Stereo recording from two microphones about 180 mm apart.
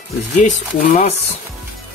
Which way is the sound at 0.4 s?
40° left (ahead or behind).